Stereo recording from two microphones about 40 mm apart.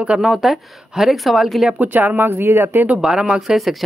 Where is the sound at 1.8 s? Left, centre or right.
Right.